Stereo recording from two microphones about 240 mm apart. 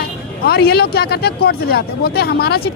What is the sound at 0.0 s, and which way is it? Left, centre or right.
Speech, left.